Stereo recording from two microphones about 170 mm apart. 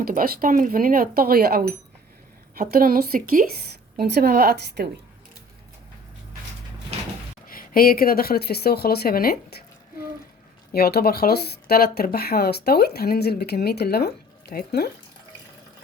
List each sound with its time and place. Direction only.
0.0 s speech: 60° right (ahead or behind)
3.9 s speech: 70° right (ahead or behind)
6.9 s door: 35° right (ahead or behind)
7.4 s speech: 60° left (ahead or behind)
10.7 s speech: 65° left (ahead or behind)